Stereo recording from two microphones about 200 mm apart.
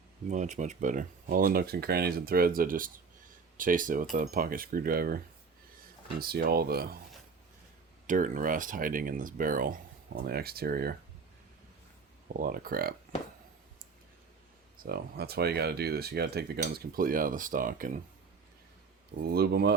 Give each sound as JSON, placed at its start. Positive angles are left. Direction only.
{"t": 0.3, "sound": "speech", "side_deg": -35}
{"t": 8.0, "sound": "speech", "side_deg": -40}
{"t": 12.4, "sound": "speech", "side_deg": -45}
{"t": 14.8, "sound": "speech", "side_deg": -50}
{"t": 19.3, "sound": "speech", "side_deg": -55}